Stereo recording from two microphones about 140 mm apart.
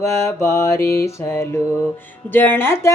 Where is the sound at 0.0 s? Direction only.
20° left (ahead or behind).